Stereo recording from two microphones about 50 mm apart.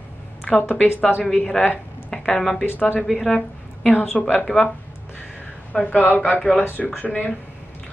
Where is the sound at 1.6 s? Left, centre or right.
Centre.